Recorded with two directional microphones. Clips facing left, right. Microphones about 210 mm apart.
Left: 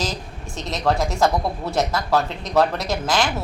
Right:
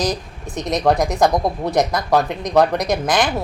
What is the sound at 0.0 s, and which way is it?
Speech, 15° right (ahead or behind).